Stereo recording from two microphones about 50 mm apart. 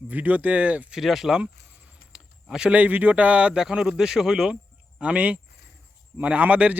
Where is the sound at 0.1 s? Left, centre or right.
Right.